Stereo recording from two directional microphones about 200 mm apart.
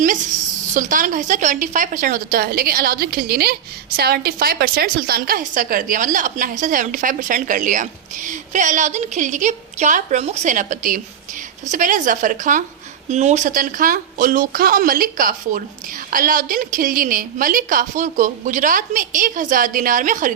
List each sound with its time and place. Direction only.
0.7 s a woman's voice: 40° right (ahead or behind)